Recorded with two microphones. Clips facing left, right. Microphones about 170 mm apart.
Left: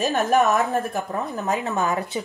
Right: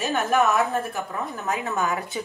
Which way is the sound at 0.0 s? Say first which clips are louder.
Left 2 dB; 40° left (ahead or behind).